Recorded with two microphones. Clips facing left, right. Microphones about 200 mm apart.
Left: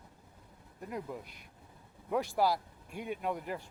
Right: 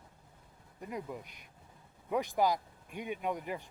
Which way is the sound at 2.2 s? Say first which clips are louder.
Even; 15° right (ahead or behind).